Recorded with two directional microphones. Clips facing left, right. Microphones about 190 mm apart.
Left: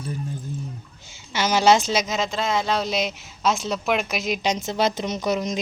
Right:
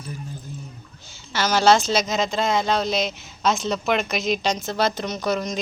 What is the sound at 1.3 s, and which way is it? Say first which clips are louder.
Speech: even; 15° left (ahead or behind).